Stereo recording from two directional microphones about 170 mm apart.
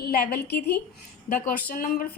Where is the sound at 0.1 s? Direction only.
65° left (ahead or behind).